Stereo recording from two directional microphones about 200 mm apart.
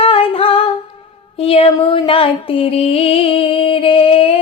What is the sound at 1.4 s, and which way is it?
Music, 30° left (ahead or behind).